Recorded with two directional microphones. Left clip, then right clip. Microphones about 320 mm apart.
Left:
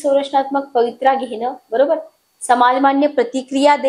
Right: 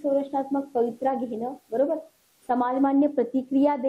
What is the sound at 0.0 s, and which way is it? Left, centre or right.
A woman's voice, centre.